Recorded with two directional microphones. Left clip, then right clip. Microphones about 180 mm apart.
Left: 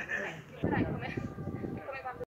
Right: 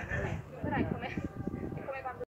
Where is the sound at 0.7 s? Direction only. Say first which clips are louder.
Left 1 dB; 45° left (ahead or behind).